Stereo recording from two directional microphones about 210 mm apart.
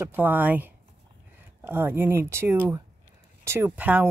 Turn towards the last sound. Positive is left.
turn(degrees=-5)  # may be behind; listen again after turning